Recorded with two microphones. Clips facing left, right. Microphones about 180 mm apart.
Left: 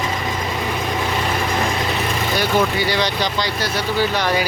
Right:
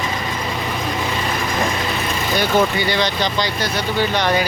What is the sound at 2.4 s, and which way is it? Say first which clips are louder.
Speech: right 2 dB; 5° left (ahead or behind).